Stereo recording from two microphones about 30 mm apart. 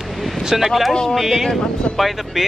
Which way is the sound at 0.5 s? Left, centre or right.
Centre.